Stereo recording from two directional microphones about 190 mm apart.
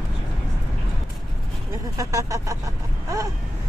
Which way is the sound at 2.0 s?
15° right (ahead or behind).